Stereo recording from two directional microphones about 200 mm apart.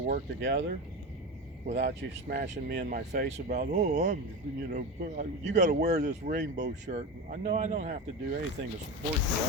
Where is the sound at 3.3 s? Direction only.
40° right (ahead or behind).